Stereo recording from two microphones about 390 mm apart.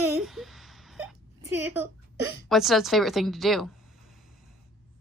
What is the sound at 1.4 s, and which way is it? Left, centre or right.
A woman's voice, centre.